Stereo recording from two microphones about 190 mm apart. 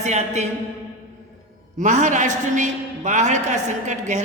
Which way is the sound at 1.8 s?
40° right (ahead or behind).